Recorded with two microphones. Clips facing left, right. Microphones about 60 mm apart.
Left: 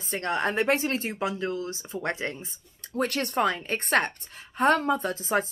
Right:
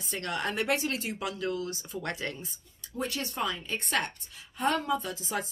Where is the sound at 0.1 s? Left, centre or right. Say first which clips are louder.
Left 6 dB; left.